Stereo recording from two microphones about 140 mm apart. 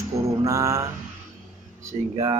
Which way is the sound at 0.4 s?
25° right (ahead or behind).